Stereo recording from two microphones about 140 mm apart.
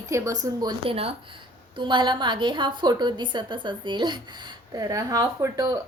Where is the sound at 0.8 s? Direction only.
45° right (ahead or behind).